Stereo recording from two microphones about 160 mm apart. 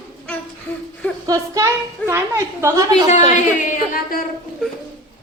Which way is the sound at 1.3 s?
20° right (ahead or behind).